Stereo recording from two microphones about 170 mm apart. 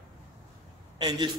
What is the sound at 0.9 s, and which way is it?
Speech, 25° right (ahead or behind).